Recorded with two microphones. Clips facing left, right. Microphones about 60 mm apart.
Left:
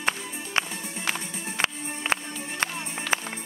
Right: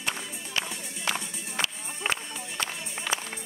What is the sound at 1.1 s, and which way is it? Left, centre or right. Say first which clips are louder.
Music: even; left.